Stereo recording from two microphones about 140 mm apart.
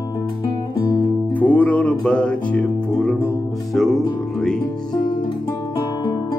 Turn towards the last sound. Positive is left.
turn(degrees=5)  # may be behind; listen again after turning